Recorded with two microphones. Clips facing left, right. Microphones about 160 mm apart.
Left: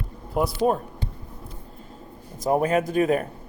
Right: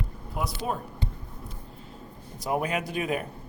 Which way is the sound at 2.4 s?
40° left (ahead or behind).